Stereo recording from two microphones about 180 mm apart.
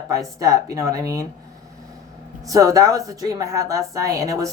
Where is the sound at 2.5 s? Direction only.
20° right (ahead or behind).